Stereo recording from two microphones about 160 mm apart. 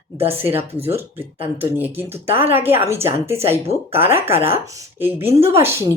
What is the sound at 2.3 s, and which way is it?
Speech, 15° right (ahead or behind).